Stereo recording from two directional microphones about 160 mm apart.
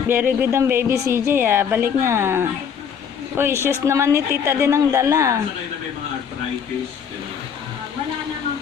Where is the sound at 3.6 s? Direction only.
15° right (ahead or behind).